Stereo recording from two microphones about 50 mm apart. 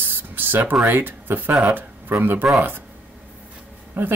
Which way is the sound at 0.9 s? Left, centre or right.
Right.